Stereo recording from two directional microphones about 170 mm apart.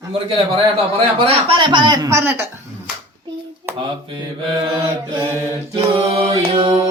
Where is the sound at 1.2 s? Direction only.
30° right (ahead or behind); by 2.4 s 15° right (ahead or behind).